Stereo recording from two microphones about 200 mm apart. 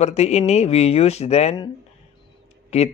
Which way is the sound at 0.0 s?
30° left (ahead or behind).